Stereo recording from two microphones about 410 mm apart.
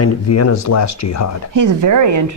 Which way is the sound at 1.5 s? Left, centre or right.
Right.